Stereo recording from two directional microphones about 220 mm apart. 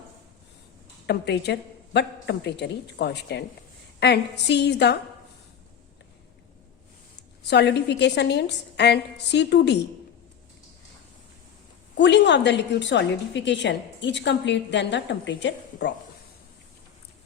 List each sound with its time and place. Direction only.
1.0 s a woman's voice: 50° left (ahead or behind)
7.5 s a woman's voice: 50° left (ahead or behind)
11.9 s a woman's voice: 50° left (ahead or behind)